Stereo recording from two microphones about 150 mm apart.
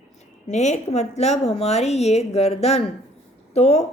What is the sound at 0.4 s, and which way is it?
A woman's voice, 50° left (ahead or behind).